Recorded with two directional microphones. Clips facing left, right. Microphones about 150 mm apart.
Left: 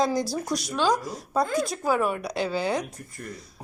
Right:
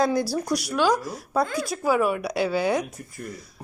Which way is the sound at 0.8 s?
20° left (ahead or behind).